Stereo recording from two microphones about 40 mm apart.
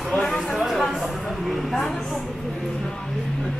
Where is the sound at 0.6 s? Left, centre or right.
Centre.